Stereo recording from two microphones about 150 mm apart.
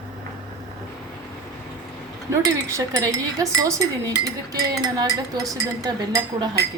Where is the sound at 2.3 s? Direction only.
20° right (ahead or behind).